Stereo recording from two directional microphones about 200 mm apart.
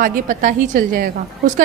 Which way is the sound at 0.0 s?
40° right (ahead or behind).